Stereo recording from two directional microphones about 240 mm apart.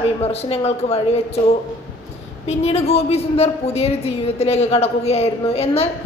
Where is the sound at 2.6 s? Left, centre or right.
Left.